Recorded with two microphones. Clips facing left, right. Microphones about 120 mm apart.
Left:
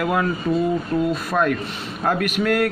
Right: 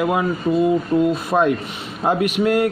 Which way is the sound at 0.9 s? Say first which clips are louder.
Right 4 dB; 20° right (ahead or behind).